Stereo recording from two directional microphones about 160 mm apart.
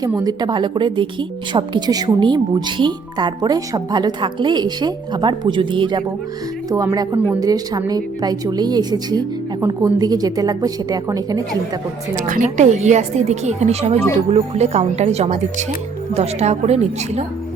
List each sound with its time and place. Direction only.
0.2 s speech: 25° right (ahead or behind)
6.7 s speech: 20° right (ahead or behind)
12.1 s a woman's voice: 55° right (ahead or behind)